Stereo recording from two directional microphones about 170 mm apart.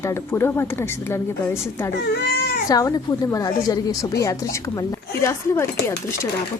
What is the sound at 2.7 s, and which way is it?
A woman's voice, 20° left (ahead or behind).